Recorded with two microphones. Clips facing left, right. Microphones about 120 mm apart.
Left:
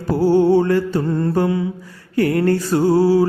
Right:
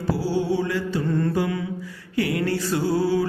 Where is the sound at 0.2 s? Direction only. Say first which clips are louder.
Left 13 dB; 50° left (ahead or behind).